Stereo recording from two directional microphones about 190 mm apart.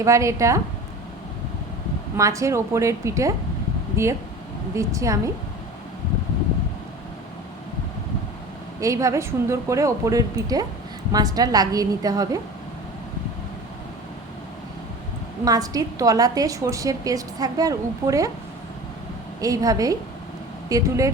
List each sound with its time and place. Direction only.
0.0 s a woman's voice: 15° right (ahead or behind)
2.1 s a woman's voice: 15° right (ahead or behind)
8.8 s a woman's voice: 15° right (ahead or behind)
15.4 s a woman's voice: 20° right (ahead or behind)
19.4 s a woman's voice: 20° right (ahead or behind)